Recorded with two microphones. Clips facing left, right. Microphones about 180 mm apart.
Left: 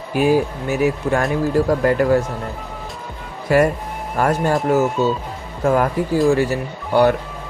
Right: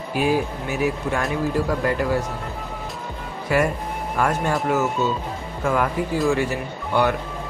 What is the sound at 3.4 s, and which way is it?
Speech, 40° left (ahead or behind).